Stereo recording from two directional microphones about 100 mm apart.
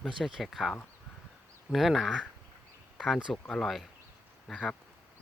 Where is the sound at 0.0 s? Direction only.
5° right (ahead or behind).